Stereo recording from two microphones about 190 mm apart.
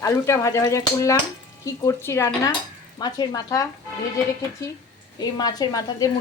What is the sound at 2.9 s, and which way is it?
Speech, 20° left (ahead or behind).